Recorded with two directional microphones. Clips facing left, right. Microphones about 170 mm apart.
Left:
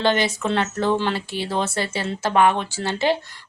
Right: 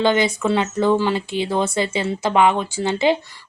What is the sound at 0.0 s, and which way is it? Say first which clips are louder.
A woman's voice: right 3 dB; 15° right (ahead or behind).